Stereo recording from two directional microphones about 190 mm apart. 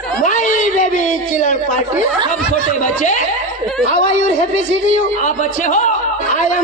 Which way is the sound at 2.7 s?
40° left (ahead or behind).